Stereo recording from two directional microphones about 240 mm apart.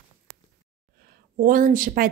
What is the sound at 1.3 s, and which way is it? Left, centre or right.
Speech, right.